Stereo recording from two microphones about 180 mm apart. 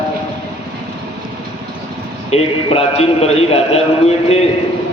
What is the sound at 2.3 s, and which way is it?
A man's voice, 35° left (ahead or behind).